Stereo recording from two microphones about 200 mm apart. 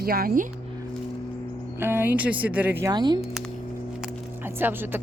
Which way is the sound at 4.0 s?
10° right (ahead or behind).